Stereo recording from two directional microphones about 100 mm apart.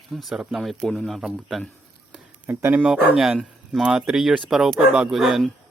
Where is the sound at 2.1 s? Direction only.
20° right (ahead or behind).